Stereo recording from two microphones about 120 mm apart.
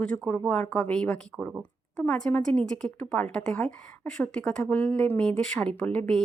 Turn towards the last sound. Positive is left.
turn(degrees=10)  # may be behind; listen again after turning